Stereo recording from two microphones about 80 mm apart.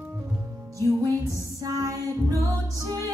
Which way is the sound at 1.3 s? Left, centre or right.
Right.